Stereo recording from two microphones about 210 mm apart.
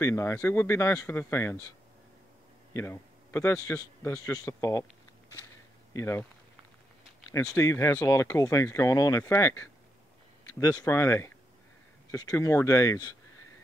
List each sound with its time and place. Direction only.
0.0 s speech: 15° left (ahead or behind)
2.7 s speech: 10° left (ahead or behind)
5.9 s speech: 10° left (ahead or behind)
7.2 s speech: 15° left (ahead or behind)